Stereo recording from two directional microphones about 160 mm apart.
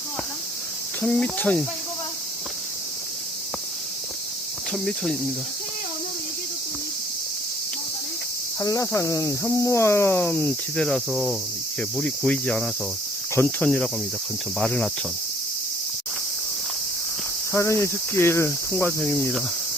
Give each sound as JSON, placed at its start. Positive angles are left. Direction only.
{"t": 1.0, "sound": "speech", "side_deg": 5}
{"t": 4.7, "sound": "cricket", "side_deg": 5}
{"t": 8.6, "sound": "speech", "side_deg": 20}
{"t": 14.6, "sound": "cricket", "side_deg": 5}
{"t": 17.5, "sound": "speech", "side_deg": 15}